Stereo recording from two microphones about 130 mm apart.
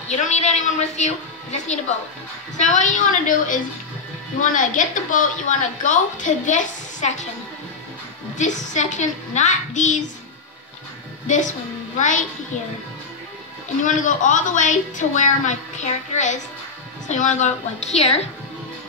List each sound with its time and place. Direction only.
0.1 s a woman's voice: 60° left (ahead or behind)
8.4 s a woman's voice: 70° left (ahead or behind)
11.2 s a woman's voice: 75° left (ahead or behind)
13.8 s a woman's voice: 75° left (ahead or behind); by 18.2 s 55° left (ahead or behind)